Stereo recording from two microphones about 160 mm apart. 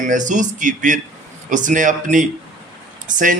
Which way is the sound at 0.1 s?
50° right (ahead or behind).